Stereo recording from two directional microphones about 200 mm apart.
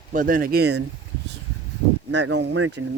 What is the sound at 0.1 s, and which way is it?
Speech, 45° right (ahead or behind).